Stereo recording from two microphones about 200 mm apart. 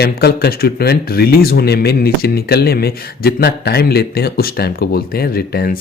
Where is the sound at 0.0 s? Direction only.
55° left (ahead or behind).